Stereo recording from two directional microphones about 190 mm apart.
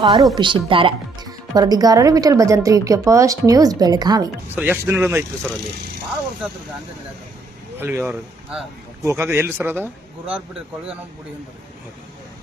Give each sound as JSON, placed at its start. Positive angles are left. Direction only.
{"t": 0.0, "sound": "speech", "side_deg": -25}
{"t": 4.5, "sound": "a man's voice", "side_deg": -10}
{"t": 7.8, "sound": "a man's voice", "side_deg": -10}